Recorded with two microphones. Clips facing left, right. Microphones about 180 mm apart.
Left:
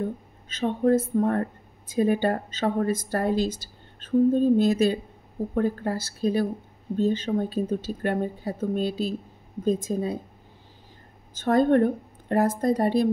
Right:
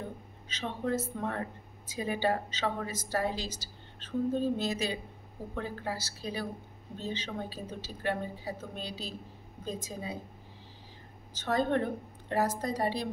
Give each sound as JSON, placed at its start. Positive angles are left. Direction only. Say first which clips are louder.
{"t": 0.5, "sound": "speech", "louder": "left 11 dB", "side_deg": 50}
{"t": 11.3, "sound": "speech", "louder": "left 9 dB", "side_deg": 50}